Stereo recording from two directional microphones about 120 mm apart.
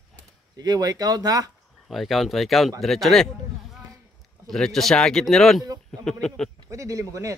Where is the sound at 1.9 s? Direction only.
Centre (ahead or behind).